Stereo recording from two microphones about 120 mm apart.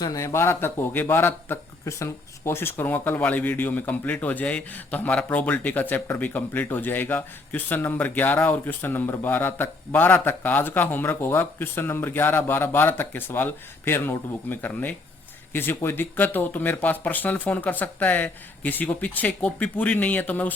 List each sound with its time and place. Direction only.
0.0 s a man's voice: 30° left (ahead or behind); by 20.5 s 15° left (ahead or behind)